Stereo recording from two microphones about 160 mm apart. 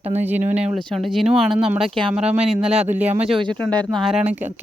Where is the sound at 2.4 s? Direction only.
40° right (ahead or behind).